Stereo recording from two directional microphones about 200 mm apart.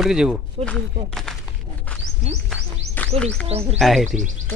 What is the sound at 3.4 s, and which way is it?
Speech, 30° right (ahead or behind).